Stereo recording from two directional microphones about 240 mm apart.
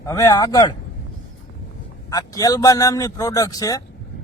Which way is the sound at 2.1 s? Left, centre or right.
Centre.